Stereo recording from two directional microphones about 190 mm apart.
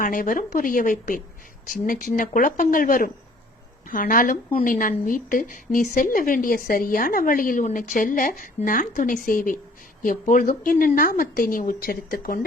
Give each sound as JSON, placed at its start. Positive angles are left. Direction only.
{"t": 0.0, "sound": "a woman's voice", "side_deg": 45}